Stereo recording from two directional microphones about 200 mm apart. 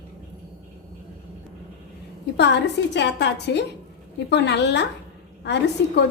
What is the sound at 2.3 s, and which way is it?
A woman's voice, 60° left (ahead or behind).